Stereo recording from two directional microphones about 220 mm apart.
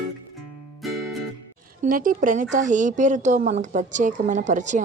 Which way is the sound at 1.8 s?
40° right (ahead or behind).